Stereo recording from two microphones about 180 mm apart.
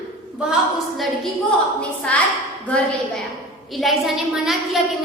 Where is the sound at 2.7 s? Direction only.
5° left (ahead or behind).